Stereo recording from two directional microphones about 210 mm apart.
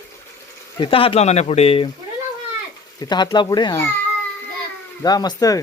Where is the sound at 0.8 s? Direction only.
25° left (ahead or behind).